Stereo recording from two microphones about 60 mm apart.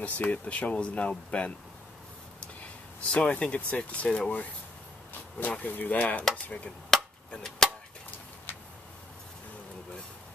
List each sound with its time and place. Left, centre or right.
0.0 s speech: left
6.9 s chop: centre
7.2 s cap gun: centre